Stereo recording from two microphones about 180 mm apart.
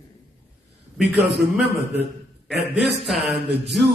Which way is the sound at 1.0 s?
70° right (ahead or behind).